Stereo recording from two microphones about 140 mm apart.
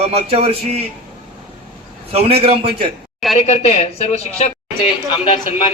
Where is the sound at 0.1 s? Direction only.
45° right (ahead or behind).